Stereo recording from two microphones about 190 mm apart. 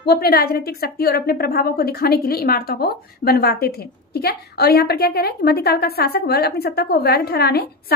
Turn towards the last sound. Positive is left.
turn(degrees=55)  # may be behind; listen again after turning